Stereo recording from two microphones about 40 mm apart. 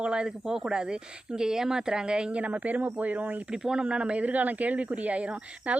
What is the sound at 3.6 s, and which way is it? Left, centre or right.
Speech, right.